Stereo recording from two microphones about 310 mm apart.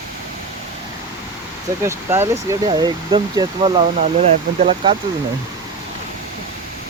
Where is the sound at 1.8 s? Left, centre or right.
Centre.